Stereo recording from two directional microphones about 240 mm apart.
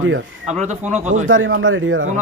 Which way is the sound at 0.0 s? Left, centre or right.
Right.